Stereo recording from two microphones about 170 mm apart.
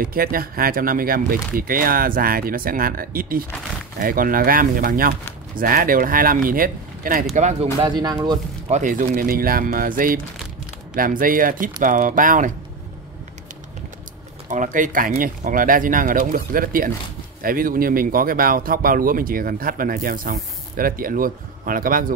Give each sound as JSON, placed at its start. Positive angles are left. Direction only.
{"t": 0.0, "sound": "speech", "side_deg": -55}
{"t": 7.8, "sound": "speech", "side_deg": -25}
{"t": 8.6, "sound": "speech", "side_deg": -45}
{"t": 14.5, "sound": "speech", "side_deg": -50}